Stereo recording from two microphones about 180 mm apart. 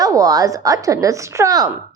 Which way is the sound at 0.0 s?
20° right (ahead or behind).